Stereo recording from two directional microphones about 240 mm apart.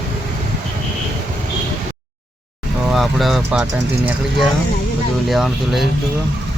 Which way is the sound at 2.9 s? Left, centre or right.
Centre.